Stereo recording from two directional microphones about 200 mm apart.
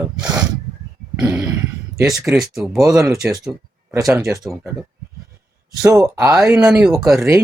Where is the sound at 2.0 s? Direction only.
15° right (ahead or behind).